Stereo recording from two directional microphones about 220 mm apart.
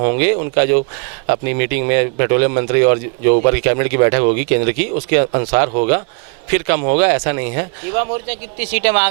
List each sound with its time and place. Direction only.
0.0 s speech: 15° right (ahead or behind)